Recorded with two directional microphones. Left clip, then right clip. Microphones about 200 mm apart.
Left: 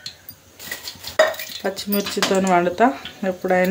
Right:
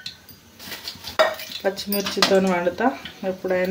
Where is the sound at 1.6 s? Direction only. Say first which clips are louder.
Even; 30° left (ahead or behind).